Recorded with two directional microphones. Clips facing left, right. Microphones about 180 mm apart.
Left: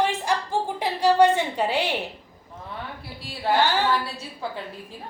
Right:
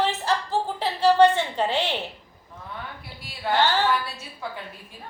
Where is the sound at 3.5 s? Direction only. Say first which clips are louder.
Left 2 dB; 30° left (ahead or behind).